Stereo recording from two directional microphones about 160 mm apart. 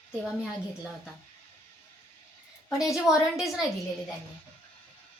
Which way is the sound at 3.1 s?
Centre (ahead or behind).